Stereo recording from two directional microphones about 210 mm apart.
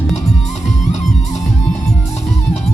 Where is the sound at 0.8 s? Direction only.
35° left (ahead or behind).